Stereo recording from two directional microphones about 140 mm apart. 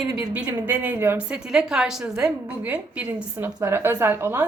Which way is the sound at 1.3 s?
5° right (ahead or behind).